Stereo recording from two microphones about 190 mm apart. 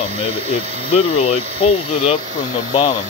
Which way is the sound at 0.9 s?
35° left (ahead or behind).